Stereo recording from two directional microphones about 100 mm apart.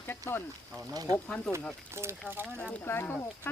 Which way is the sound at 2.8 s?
20° left (ahead or behind).